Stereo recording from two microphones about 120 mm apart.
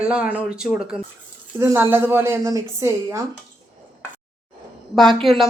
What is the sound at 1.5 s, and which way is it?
A woman's voice, 20° right (ahead or behind).